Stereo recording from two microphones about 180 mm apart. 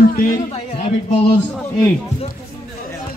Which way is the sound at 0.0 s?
55° left (ahead or behind).